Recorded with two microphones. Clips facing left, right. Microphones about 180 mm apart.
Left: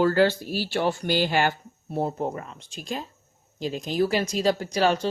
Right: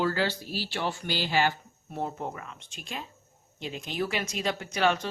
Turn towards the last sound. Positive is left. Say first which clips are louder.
# left 4 dB
turn(degrees=35)  # may be behind; listen again after turning